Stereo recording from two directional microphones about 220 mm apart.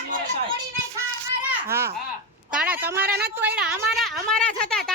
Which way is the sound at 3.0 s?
45° right (ahead or behind).